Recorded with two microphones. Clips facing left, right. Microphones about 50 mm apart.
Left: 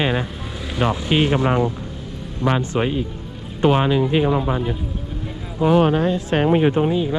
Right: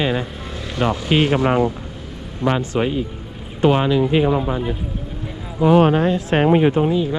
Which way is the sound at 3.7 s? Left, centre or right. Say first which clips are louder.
Right 1 dB; left.